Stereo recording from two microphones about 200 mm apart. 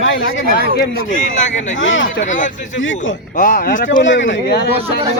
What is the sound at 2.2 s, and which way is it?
Speech, 40° left (ahead or behind).